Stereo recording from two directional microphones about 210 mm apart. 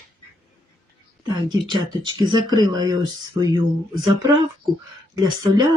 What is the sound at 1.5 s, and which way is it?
Speech, 20° right (ahead or behind).